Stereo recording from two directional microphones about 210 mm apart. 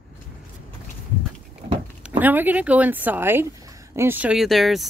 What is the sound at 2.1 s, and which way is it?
Speech, 10° right (ahead or behind).